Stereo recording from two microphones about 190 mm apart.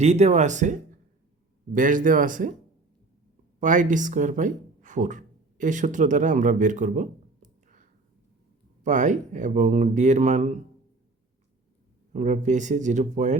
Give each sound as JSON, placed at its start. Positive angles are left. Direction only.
{"t": 0.0, "sound": "speech", "side_deg": -35}
{"t": 3.6, "sound": "speech", "side_deg": -40}
{"t": 12.1, "sound": "speech", "side_deg": -40}